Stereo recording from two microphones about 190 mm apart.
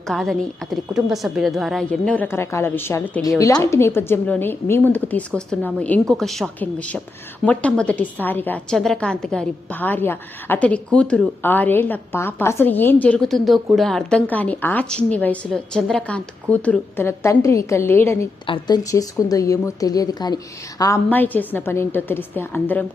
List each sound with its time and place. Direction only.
0.1 s a woman's voice: centre (ahead or behind)
18.4 s a woman's voice: 25° left (ahead or behind)